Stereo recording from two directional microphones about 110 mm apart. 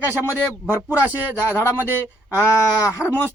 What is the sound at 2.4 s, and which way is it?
Speech, 30° left (ahead or behind).